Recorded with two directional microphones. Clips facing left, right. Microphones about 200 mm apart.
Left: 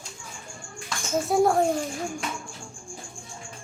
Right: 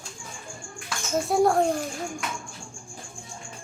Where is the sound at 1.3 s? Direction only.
Centre (ahead or behind).